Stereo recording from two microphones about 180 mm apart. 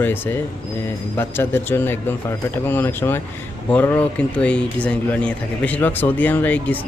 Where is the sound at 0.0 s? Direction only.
10° left (ahead or behind).